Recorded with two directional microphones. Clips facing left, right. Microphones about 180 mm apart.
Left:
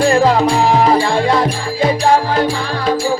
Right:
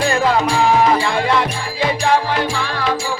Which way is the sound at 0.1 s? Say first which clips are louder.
Left 4 dB; 35° left (ahead or behind).